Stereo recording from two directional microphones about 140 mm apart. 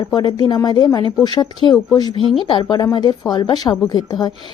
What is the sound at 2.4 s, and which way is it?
A woman's voice, 40° left (ahead or behind).